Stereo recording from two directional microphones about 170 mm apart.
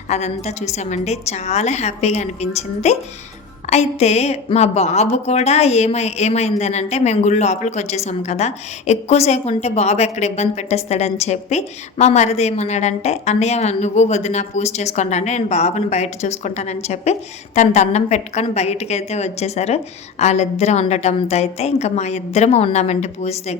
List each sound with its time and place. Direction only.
0.1 s a woman's voice: 40° left (ahead or behind)